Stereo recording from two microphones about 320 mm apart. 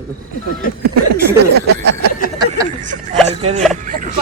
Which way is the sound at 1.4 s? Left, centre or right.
Right.